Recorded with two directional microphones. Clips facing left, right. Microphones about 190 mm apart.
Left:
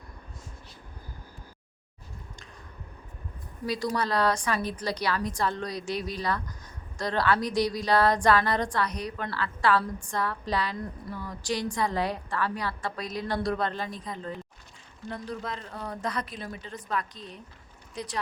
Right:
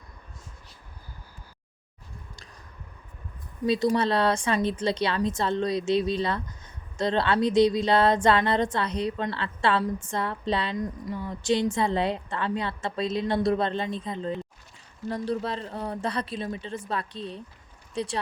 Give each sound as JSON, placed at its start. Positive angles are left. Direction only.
{"t": 3.7, "sound": "a woman's voice", "side_deg": -25}